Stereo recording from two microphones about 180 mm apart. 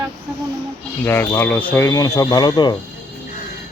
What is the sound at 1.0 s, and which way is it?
Speech, 15° left (ahead or behind).